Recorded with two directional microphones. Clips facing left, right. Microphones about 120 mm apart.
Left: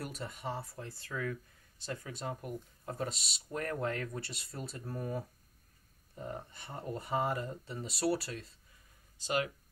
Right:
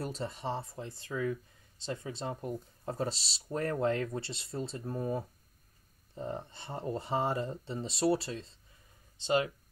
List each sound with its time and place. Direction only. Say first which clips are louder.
0.0 s speech: right 4 dB; 30° right (ahead or behind)